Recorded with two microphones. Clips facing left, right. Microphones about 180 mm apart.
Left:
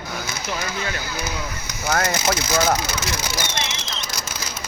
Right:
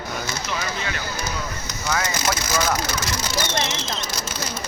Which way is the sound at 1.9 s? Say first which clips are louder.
Left 3 dB; 55° left (ahead or behind).